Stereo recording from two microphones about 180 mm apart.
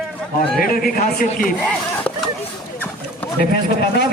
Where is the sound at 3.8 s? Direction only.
60° left (ahead or behind).